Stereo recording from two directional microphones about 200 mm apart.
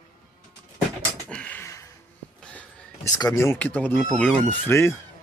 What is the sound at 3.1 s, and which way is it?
Speech, 15° left (ahead or behind).